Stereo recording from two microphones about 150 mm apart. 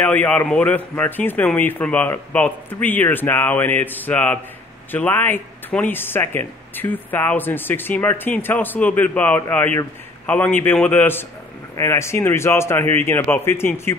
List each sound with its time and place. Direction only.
0.0 s speech: 10° left (ahead or behind)